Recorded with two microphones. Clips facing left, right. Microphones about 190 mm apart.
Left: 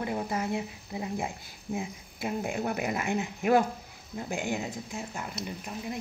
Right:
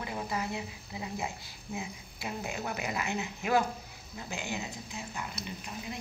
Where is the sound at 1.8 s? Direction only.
50° left (ahead or behind).